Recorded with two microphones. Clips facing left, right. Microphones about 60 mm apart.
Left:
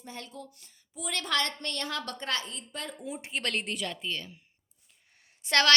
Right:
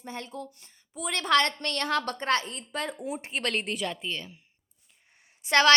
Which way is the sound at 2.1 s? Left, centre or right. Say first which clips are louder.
Right 7 dB; right.